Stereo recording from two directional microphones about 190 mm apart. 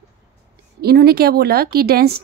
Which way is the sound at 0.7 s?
55° right (ahead or behind).